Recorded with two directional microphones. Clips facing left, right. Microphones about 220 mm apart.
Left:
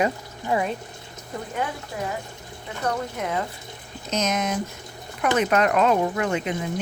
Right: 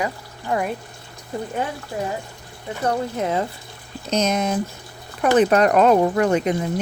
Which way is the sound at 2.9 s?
30° right (ahead or behind).